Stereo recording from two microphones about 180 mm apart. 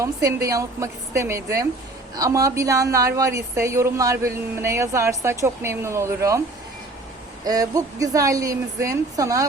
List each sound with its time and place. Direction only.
0.0 s a woman's voice: 15° right (ahead or behind)
7.4 s speech: 20° right (ahead or behind)